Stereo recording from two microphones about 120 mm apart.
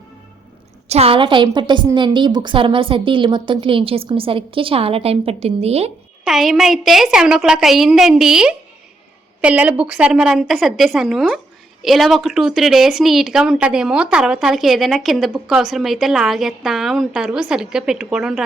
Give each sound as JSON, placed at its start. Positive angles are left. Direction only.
{"t": 0.9, "sound": "a woman's voice", "side_deg": -60}
{"t": 6.2, "sound": "a woman's voice", "side_deg": 0}